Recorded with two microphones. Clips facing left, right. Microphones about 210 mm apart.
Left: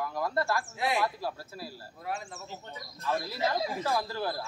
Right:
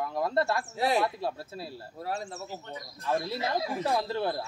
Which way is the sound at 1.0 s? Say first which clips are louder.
Right 3 dB; 25° right (ahead or behind).